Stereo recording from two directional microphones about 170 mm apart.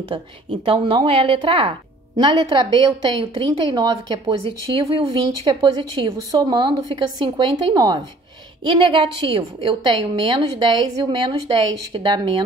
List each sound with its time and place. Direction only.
0.1 s a woman's voice: 30° right (ahead or behind)